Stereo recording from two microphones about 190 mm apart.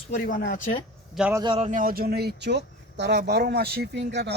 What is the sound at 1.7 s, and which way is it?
Speech, 50° right (ahead or behind).